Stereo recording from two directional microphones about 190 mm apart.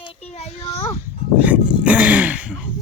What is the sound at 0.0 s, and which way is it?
Children playing, 30° left (ahead or behind).